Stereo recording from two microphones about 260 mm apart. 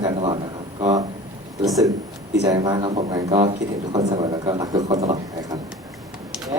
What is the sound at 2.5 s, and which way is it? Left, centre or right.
A man's voice, centre.